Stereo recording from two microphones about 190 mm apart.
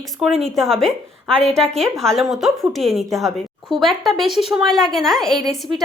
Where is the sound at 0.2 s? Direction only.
Centre (ahead or behind).